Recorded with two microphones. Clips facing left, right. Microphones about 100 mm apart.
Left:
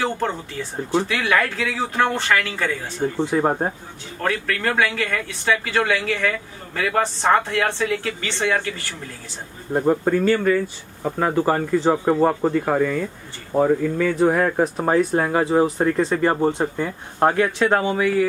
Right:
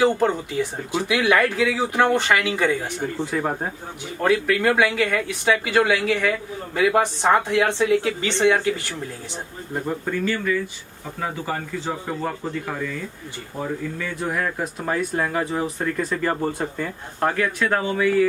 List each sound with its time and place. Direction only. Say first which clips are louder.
0.0 s speech: right 5 dB; 15° right (ahead or behind)
3.2 s speech: left 6 dB; 30° left (ahead or behind)
4.2 s speech: right 4 dB; 10° right (ahead or behind)
9.7 s speech: left 8 dB; 40° left (ahead or behind)
11.1 s speech: left 8 dB; 50° left (ahead or behind); by 18.1 s 20° left (ahead or behind)